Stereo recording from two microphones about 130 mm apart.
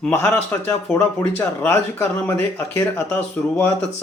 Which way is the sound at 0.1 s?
15° left (ahead or behind).